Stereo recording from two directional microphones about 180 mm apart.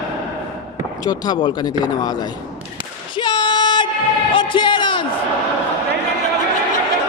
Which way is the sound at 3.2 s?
25° left (ahead or behind).